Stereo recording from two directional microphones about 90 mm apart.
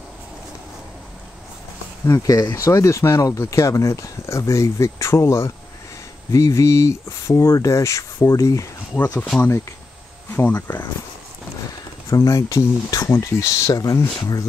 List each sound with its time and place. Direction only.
2.0 s speech: 40° left (ahead or behind)
10.3 s speech: 20° left (ahead or behind)
12.3 s speech: 40° left (ahead or behind)